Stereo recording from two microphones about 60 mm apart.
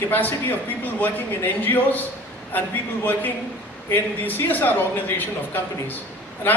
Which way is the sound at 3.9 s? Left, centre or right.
Left.